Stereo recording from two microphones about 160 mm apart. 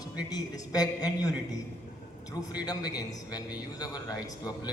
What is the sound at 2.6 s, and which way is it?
A man's voice, 25° left (ahead or behind).